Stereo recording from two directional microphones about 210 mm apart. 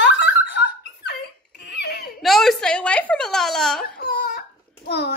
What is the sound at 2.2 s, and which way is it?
A woman's voice, centre (ahead or behind).